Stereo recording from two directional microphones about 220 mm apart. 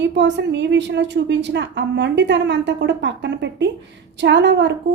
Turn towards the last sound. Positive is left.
turn(degrees=-55)  # may be behind; listen again after turning